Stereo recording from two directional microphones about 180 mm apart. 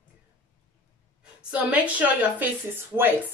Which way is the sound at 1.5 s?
10° right (ahead or behind).